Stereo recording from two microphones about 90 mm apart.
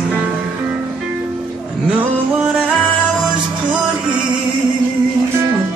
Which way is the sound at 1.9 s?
15° right (ahead or behind).